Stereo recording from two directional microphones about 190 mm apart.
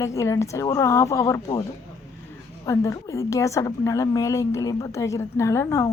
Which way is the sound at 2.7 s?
15° left (ahead or behind).